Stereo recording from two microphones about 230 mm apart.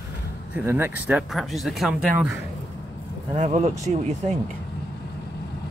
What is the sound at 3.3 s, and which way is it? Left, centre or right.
Speech, right.